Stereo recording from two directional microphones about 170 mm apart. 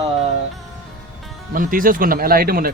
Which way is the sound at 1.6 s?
55° right (ahead or behind).